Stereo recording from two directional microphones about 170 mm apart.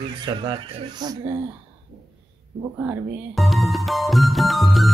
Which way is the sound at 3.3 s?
Centre (ahead or behind).